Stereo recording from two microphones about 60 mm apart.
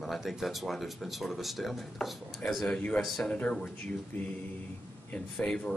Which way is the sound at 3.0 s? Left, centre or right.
Centre.